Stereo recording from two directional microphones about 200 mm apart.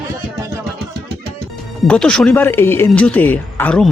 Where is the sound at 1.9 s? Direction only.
5° left (ahead or behind).